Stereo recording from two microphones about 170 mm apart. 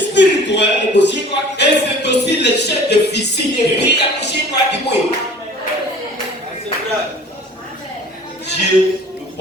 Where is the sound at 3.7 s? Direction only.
80° left.